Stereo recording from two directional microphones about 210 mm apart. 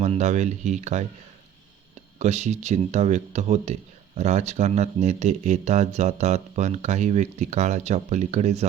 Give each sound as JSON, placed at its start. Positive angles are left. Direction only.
{"t": 0.0, "sound": "speech", "side_deg": -30}
{"t": 2.1, "sound": "speech", "side_deg": -35}